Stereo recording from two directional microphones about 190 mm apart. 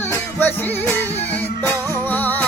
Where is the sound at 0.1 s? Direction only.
10° left (ahead or behind).